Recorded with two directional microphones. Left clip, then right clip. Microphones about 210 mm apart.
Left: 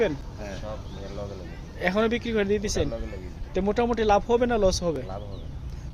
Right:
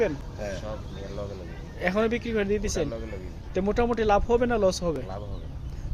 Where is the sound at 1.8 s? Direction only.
10° left (ahead or behind).